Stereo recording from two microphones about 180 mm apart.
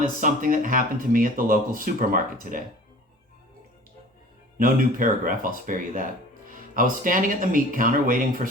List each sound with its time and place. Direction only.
0.0 s speech: 45° right (ahead or behind)
4.5 s speech: 50° right (ahead or behind)